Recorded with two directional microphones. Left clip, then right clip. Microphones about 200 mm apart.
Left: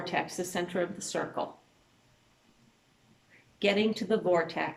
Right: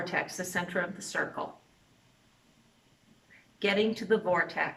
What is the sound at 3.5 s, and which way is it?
A woman's voice, 15° left (ahead or behind).